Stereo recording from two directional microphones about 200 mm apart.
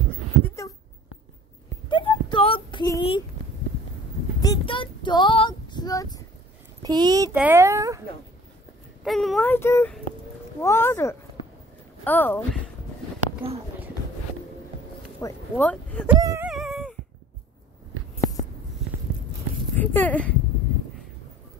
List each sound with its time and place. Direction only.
0.4 s a sound: 15° left (ahead or behind)
1.9 s a sound: 25° left (ahead or behind)
4.4 s child singing: 20° left (ahead or behind)
6.8 s speech: 20° right (ahead or behind)
9.0 s speech: centre (ahead or behind)
13.4 s speech: 25° right (ahead or behind)
15.1 s speech: 15° left (ahead or behind)
16.1 s speech: 15° right (ahead or behind)
16.4 s a sound: centre (ahead or behind)
19.8 s speech: 10° left (ahead or behind)